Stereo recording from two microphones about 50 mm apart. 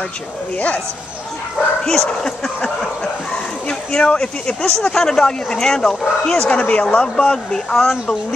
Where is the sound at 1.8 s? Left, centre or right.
Centre.